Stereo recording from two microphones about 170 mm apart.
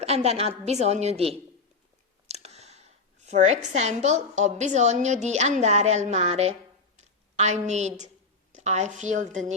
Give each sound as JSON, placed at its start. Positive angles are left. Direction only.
{"t": 0.0, "sound": "a woman's voice", "side_deg": -40}
{"t": 2.2, "sound": "a woman's voice", "side_deg": -40}